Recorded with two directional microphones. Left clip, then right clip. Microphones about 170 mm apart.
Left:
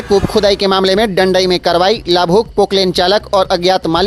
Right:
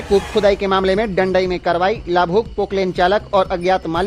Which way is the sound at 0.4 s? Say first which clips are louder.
Left 4 dB; 25° left (ahead or behind).